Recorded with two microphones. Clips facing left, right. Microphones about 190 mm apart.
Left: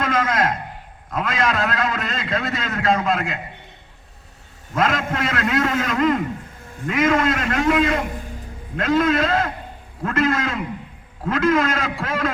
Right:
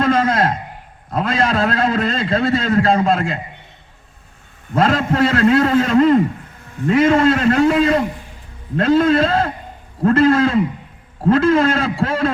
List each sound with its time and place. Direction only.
0.0 s a sound: 30° right (ahead or behind)
1.1 s a man's voice: 30° right (ahead or behind)
4.7 s a man's voice: 30° right (ahead or behind)